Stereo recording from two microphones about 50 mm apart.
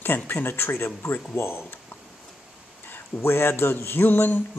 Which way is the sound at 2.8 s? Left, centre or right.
Left.